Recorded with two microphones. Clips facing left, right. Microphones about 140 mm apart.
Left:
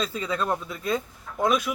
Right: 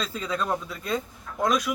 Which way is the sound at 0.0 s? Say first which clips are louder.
Left 2 dB; centre (ahead or behind).